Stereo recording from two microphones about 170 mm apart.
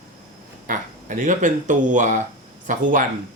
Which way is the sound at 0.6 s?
50° right (ahead or behind).